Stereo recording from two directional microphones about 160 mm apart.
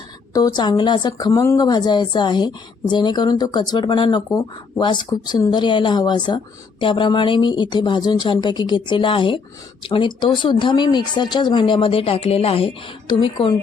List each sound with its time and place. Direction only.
0.3 s a woman's voice: 25° left (ahead or behind)